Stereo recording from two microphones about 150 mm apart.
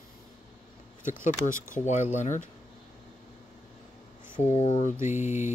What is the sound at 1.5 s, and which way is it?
Speech, 60° left (ahead or behind).